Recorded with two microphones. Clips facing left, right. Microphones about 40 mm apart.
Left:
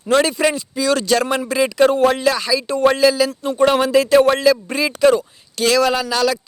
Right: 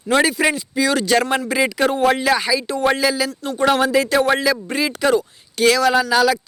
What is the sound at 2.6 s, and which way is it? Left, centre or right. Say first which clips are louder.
Speech: left 4 dB; centre.